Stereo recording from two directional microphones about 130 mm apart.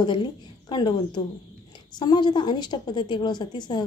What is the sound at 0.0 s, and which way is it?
A woman's voice, 35° left (ahead or behind).